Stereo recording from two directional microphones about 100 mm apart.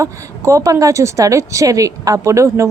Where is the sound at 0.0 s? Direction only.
30° right (ahead or behind).